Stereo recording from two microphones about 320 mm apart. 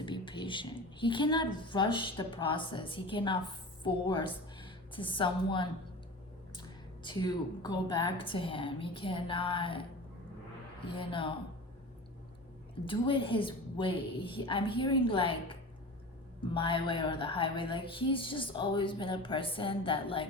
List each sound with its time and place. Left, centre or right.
0.0 s a woman's voice: centre
10.8 s speech: centre
12.8 s speech: centre